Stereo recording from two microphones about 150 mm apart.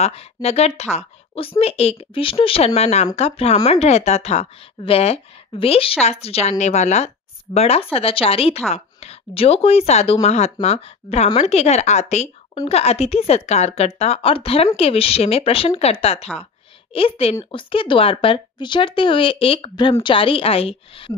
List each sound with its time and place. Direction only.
0.0 s a woman's voice: 45° left (ahead or behind)